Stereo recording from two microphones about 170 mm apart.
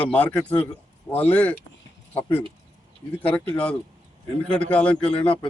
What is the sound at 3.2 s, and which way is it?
Speech, 10° left (ahead or behind).